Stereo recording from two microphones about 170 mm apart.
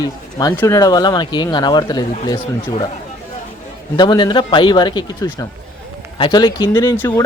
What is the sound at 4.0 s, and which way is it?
Speech, 25° left (ahead or behind).